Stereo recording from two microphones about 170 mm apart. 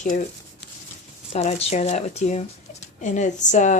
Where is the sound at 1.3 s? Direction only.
40° left (ahead or behind).